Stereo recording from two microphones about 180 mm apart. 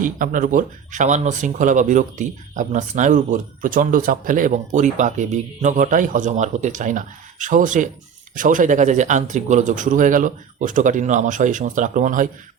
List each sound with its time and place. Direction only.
0.0 s speech: 50° right (ahead or behind)